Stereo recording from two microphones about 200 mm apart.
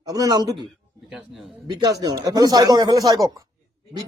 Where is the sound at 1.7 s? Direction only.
20° right (ahead or behind).